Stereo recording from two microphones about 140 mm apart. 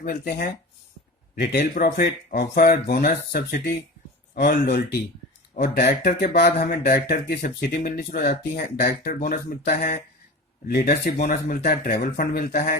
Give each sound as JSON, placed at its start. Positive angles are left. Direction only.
{"t": 0.0, "sound": "speech", "side_deg": 90}
{"t": 10.8, "sound": "speech", "side_deg": 90}